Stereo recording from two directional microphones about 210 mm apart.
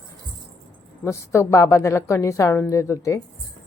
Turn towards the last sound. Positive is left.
turn(degrees=15)  # may be behind; listen again after turning